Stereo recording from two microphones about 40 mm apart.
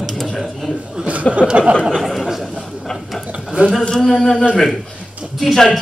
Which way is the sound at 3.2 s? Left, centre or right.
Right.